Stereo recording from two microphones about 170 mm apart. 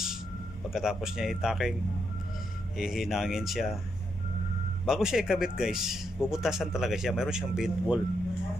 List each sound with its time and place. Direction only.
0.7 s speech: 5° right (ahead or behind)
2.8 s speech: centre (ahead or behind)
4.8 s speech: 5° right (ahead or behind)